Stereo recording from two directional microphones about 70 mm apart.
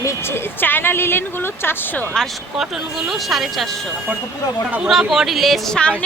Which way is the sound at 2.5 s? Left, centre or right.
Centre.